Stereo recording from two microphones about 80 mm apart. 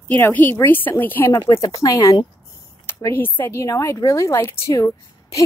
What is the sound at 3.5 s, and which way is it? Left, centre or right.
Speech, left.